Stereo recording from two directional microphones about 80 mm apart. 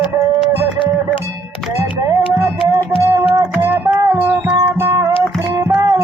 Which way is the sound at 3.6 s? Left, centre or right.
Right.